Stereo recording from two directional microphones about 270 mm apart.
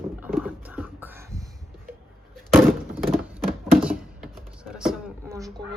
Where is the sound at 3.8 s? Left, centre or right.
Centre.